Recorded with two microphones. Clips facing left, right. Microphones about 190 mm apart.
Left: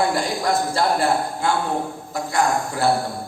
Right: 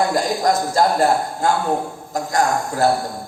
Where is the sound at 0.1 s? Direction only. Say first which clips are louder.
Right 3 dB; 40° right (ahead or behind).